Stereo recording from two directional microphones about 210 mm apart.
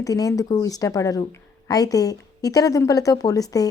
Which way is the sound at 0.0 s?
15° left (ahead or behind).